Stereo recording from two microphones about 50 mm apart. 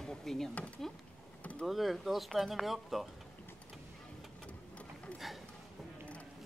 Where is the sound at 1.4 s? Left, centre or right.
Left.